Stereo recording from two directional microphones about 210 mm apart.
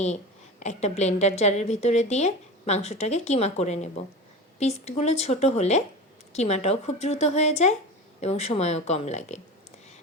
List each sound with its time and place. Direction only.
0.6 s a woman's voice: 30° left (ahead or behind)